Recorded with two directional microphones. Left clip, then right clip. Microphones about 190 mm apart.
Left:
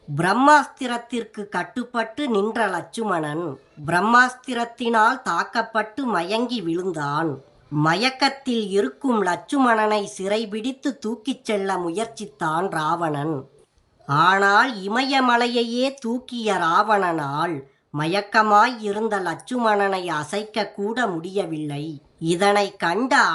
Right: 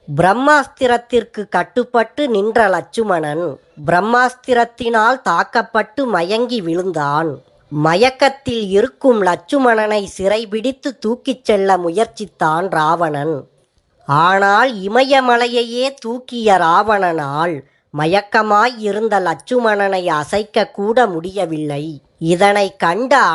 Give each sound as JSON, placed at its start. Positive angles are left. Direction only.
{"t": 0.4, "sound": "speech", "side_deg": -15}